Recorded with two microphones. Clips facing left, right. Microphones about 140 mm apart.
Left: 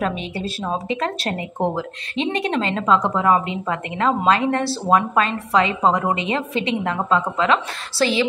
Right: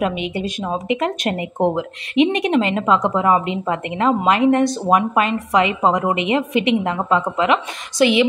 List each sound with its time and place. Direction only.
0.8 s a woman's voice: 20° right (ahead or behind)